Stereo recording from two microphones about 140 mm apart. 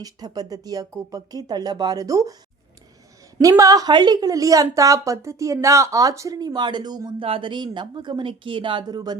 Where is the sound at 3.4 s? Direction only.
25° right (ahead or behind).